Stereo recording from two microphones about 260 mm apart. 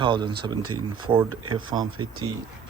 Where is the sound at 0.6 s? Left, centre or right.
Right.